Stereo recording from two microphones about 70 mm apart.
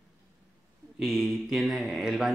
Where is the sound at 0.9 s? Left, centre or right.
Centre.